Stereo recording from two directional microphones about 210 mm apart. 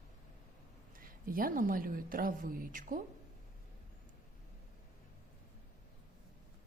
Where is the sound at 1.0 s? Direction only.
40° right (ahead or behind).